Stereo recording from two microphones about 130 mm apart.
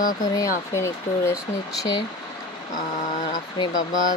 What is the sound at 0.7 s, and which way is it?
Speech, 20° left (ahead or behind).